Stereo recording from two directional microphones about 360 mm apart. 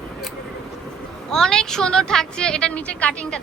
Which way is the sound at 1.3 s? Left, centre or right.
Centre.